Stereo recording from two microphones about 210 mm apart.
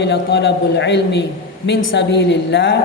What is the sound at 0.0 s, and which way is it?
A woman's voice, 55° left (ahead or behind).